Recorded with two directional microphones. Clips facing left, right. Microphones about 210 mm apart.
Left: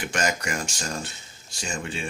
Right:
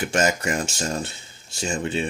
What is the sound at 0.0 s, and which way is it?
Speech, 25° right (ahead or behind).